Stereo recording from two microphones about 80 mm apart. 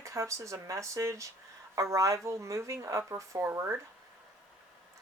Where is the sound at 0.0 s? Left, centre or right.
Right.